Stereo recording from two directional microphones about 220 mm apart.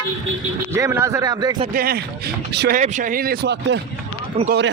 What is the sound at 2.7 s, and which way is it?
A man's voice, 35° right (ahead or behind).